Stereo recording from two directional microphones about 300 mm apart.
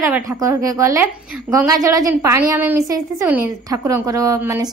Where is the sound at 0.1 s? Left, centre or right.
Centre.